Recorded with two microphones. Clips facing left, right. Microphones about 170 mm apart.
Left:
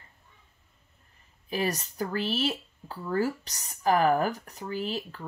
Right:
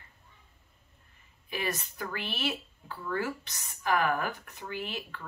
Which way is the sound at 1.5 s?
40° left (ahead or behind).